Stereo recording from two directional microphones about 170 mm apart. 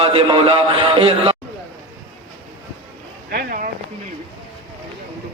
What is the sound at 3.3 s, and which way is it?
Speech, 60° right (ahead or behind).